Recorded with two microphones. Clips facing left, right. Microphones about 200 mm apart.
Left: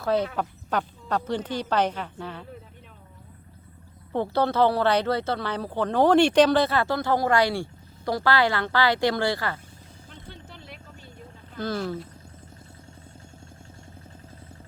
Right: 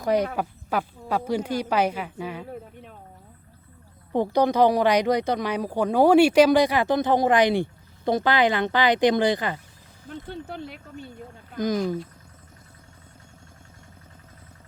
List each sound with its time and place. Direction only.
0.0 s a woman's voice: 15° right (ahead or behind)
4.1 s a woman's voice: 15° right (ahead or behind)
10.1 s speech: 55° right (ahead or behind)
11.5 s a woman's voice: 15° right (ahead or behind)